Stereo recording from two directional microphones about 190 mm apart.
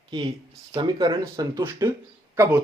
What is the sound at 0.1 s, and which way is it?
Speech, 25° right (ahead or behind).